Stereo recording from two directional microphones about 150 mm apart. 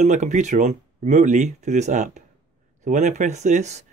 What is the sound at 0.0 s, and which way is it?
Speech, 55° right (ahead or behind).